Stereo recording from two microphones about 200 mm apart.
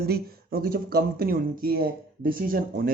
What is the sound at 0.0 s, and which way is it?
Speech, 50° right (ahead or behind).